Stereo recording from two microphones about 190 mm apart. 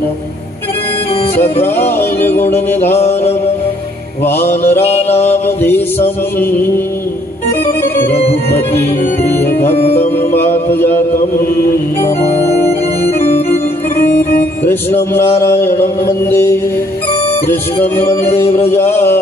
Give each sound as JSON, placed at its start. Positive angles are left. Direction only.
{"t": 1.3, "sound": "music", "side_deg": 10}
{"t": 3.0, "sound": "mantra", "side_deg": 30}
{"t": 4.2, "sound": "mantra", "side_deg": 10}
{"t": 4.8, "sound": "mantra", "side_deg": 35}
{"t": 5.2, "sound": "mantra", "side_deg": 10}
{"t": 7.6, "sound": "music", "side_deg": 10}
{"t": 9.9, "sound": "music", "side_deg": 10}
{"t": 12.0, "sound": "organ", "side_deg": 15}
{"t": 14.7, "sound": "mantra", "side_deg": 10}